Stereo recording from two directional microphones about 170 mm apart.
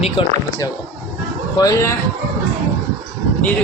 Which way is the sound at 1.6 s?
20° left (ahead or behind).